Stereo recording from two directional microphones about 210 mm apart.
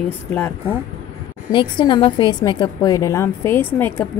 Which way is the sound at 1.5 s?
20° left (ahead or behind).